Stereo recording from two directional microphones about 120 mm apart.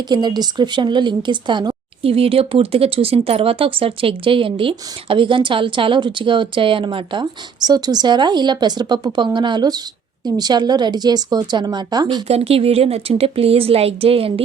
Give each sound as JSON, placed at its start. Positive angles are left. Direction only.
{"t": 0.1, "sound": "a woman's voice", "side_deg": -35}
{"t": 12.3, "sound": "a woman's voice", "side_deg": -55}